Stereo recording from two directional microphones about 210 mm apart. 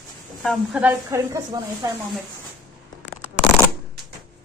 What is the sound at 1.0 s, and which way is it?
Speech, 15° right (ahead or behind).